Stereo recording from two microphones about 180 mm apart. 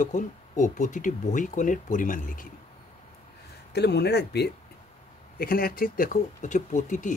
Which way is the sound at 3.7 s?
65° left (ahead or behind).